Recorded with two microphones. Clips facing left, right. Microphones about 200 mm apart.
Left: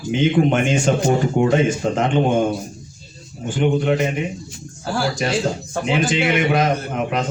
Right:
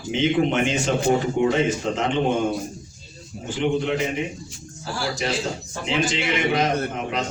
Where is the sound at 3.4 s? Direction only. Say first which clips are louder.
Left 4 dB; 50° left (ahead or behind).